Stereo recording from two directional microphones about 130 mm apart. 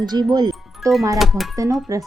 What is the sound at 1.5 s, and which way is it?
Speech, 25° right (ahead or behind).